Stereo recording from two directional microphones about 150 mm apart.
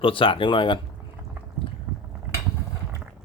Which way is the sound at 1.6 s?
35° left (ahead or behind).